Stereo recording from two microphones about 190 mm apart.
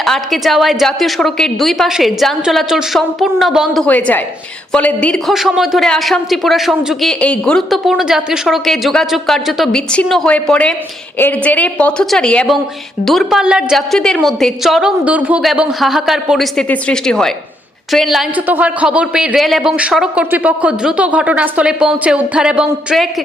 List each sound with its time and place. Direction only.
0.0 s a man's voice: centre (ahead or behind)